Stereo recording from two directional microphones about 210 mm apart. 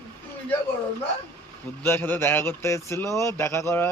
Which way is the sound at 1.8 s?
10° left (ahead or behind).